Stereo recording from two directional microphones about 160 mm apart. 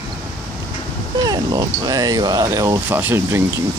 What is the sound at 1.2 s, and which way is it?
Speech, 25° right (ahead or behind).